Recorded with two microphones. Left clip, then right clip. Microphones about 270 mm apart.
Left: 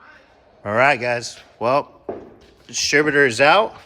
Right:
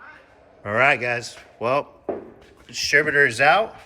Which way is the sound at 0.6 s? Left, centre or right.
Centre.